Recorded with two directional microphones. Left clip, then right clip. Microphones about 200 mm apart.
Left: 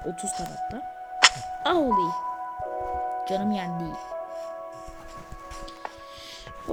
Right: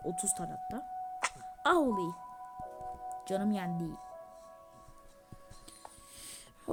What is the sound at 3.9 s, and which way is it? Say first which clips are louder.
Music: left 14 dB; 35° left (ahead or behind).